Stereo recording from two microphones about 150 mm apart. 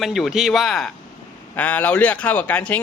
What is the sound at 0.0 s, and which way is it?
Speech, centre (ahead or behind).